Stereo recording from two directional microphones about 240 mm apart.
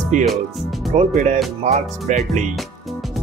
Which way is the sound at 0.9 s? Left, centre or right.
Right.